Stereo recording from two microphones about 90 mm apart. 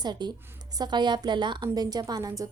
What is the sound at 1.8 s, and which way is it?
Speech, 45° right (ahead or behind).